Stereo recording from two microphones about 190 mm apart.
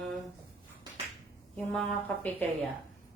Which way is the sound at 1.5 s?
5° left (ahead or behind).